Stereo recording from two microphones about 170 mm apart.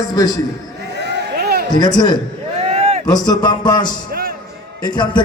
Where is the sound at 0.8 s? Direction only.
80° right.